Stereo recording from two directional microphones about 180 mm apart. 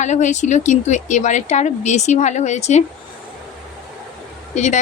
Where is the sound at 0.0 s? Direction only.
40° left (ahead or behind).